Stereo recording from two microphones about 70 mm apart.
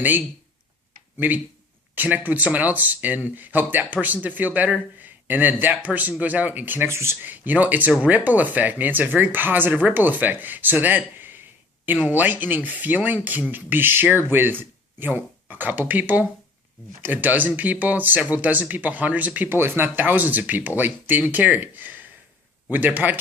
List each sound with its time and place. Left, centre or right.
1.2 s speech: right
6.8 s speech: right
7.2 s speech: right